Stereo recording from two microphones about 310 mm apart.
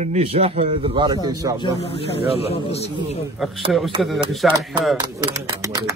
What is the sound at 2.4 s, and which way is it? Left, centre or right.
Speech, centre.